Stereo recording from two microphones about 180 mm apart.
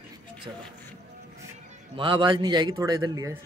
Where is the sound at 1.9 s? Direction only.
30° right (ahead or behind).